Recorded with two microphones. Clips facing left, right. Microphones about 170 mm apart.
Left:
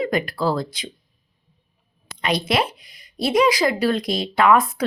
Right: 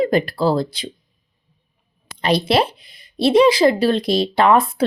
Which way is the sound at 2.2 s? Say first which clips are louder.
Right 4 dB; 30° right (ahead or behind).